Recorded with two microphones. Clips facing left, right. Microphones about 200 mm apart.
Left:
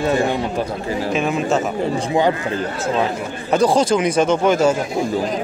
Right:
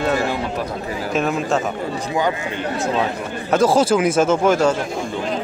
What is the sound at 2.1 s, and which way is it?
Speech, 30° left (ahead or behind).